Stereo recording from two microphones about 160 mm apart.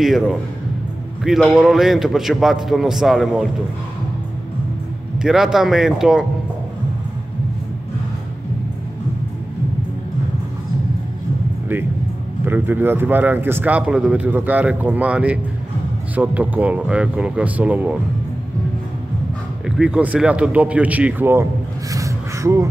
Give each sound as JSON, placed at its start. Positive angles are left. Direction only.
{"t": 0.0, "sound": "a man's voice", "side_deg": 0}
{"t": 5.2, "sound": "a man's voice", "side_deg": -5}
{"t": 12.4, "sound": "speech", "side_deg": -10}
{"t": 19.6, "sound": "speech", "side_deg": -5}
{"t": 21.9, "sound": "a sound", "side_deg": -20}